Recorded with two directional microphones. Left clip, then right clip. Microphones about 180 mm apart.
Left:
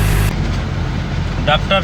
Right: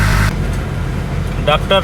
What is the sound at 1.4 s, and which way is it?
Speech, 15° right (ahead or behind).